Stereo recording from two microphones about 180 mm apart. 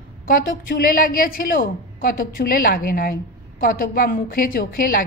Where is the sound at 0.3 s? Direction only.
55° left (ahead or behind).